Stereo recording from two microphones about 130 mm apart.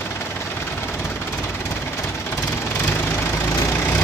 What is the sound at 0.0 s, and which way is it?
Vehicle, 20° left (ahead or behind).